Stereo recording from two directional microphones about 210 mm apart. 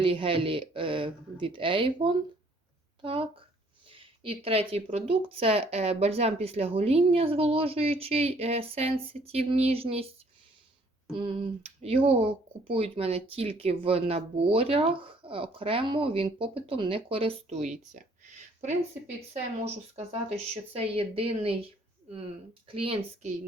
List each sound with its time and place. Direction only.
0.0 s speech: 25° right (ahead or behind)
11.1 s speech: 25° right (ahead or behind)
20.3 s speech: 30° right (ahead or behind)
22.7 s speech: 25° right (ahead or behind)